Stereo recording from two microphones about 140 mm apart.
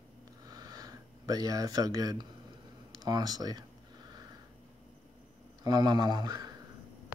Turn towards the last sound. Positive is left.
turn(degrees=-30)  # may be behind; listen again after turning